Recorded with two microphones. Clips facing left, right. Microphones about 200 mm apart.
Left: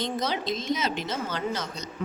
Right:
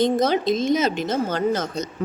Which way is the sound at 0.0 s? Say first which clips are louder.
Right 10 dB; 50° right (ahead or behind).